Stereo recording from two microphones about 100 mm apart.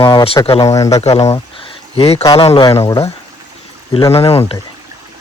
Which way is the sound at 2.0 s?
90° left.